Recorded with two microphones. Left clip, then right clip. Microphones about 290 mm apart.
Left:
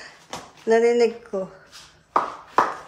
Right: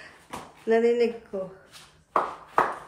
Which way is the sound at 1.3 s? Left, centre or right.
Centre.